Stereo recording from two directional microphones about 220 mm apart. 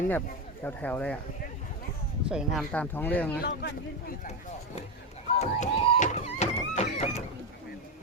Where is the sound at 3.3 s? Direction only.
45° left (ahead or behind).